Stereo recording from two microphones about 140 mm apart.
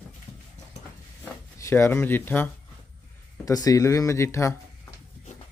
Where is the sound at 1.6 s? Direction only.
20° left (ahead or behind).